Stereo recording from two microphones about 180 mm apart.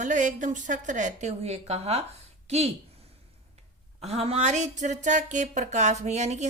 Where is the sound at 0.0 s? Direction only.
45° right (ahead or behind).